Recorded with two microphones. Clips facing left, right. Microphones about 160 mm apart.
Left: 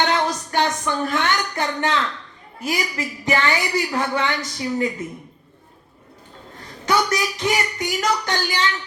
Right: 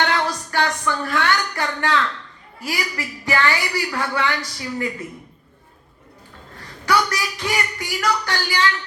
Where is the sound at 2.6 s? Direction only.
20° left (ahead or behind).